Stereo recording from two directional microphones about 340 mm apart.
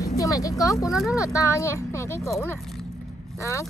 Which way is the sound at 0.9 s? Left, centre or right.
Centre.